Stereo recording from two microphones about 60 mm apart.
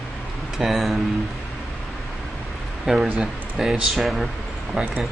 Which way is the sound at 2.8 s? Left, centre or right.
Centre.